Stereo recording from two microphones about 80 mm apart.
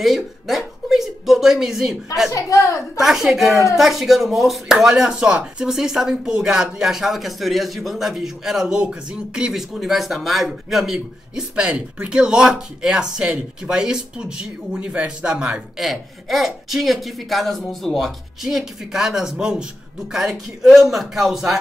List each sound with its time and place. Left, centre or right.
0.0 s a sound: centre
2.3 s a woman's voice: left
3.0 s speech: centre
15.8 s speech: centre